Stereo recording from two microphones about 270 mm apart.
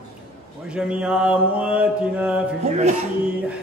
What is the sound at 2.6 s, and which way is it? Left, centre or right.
Speech, right.